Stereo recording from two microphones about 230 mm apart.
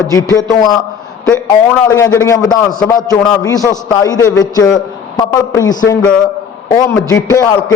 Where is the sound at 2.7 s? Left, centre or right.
Centre.